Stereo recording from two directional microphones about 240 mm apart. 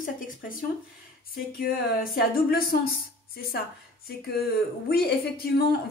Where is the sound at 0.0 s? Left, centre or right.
Left.